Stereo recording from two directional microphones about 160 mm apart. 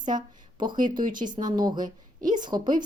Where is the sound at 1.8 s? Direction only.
55° right (ahead or behind).